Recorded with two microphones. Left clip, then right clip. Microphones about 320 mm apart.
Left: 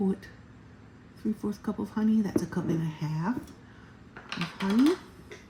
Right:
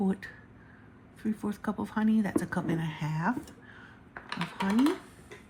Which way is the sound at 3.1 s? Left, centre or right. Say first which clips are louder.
Right 4 dB; right.